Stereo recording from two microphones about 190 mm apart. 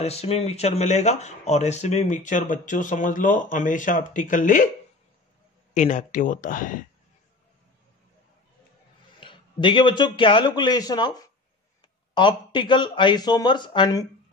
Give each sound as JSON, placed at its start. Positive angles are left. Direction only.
{"t": 0.0, "sound": "speech", "side_deg": 35}
{"t": 5.8, "sound": "speech", "side_deg": 40}
{"t": 9.2, "sound": "speech", "side_deg": 25}